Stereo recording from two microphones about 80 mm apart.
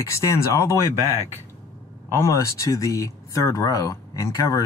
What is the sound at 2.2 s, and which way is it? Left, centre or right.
Speech, left.